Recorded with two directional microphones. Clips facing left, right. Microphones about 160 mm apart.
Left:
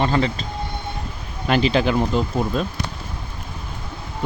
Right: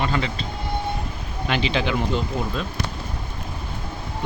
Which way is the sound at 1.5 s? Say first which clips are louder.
Left 5 dB; 40° left (ahead or behind).